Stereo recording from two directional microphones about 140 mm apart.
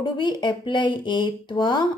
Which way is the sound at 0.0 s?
35° left (ahead or behind).